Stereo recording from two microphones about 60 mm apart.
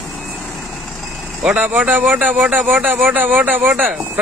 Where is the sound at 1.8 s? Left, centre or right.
Right.